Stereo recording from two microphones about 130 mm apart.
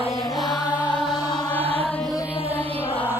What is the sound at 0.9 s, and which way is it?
Music, 35° left (ahead or behind).